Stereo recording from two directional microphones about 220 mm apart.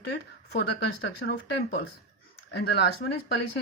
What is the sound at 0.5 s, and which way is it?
Speech, 50° left (ahead or behind).